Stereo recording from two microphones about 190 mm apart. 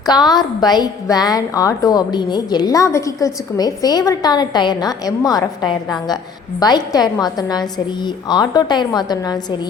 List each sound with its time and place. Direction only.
0.0 s a woman's voice: 20° left (ahead or behind)